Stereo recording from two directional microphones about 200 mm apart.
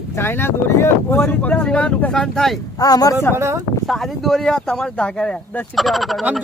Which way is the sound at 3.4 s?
15° right (ahead or behind).